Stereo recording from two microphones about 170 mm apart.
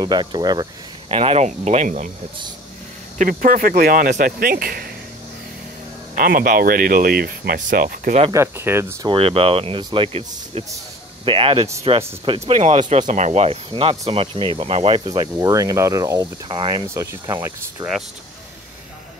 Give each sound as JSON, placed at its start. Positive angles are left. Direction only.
{"t": 0.0, "sound": "speech", "side_deg": -25}
{"t": 3.2, "sound": "speech", "side_deg": -50}
{"t": 6.1, "sound": "speech", "side_deg": -55}
{"t": 8.3, "sound": "speech", "side_deg": -15}
{"t": 9.0, "sound": "speech", "side_deg": -30}